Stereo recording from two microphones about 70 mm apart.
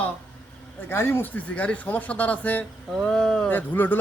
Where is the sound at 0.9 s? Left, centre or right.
Left.